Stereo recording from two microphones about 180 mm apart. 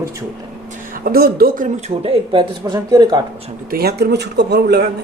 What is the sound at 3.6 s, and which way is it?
Speech, 60° right (ahead or behind).